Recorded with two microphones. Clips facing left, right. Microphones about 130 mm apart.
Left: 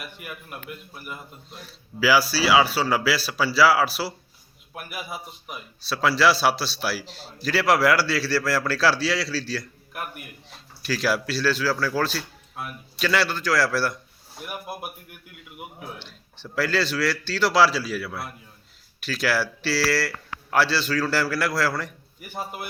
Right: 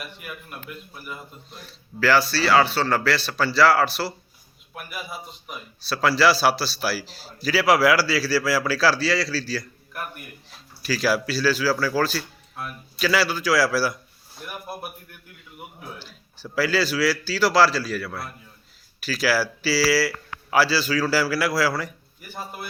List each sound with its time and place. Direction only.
1.0 s a man's voice: centre (ahead or behind)
14.4 s speech: 10° left (ahead or behind)
16.0 s a man's voice: 5° right (ahead or behind)
22.3 s speech: 15° left (ahead or behind)